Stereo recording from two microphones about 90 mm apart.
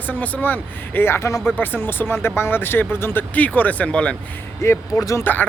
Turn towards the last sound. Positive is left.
turn(degrees=30)  # may be behind; listen again after turning